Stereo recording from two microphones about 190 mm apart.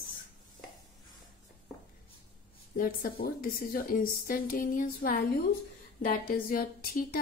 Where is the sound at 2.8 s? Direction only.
50° left (ahead or behind).